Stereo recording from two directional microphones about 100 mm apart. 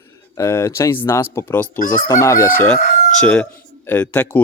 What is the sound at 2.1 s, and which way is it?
Speech, 30° left (ahead or behind).